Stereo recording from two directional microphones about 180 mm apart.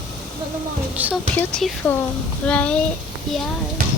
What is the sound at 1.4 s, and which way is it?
Speech, 5° left (ahead or behind).